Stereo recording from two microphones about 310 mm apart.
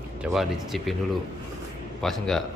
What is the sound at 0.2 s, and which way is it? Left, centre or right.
Speech, centre.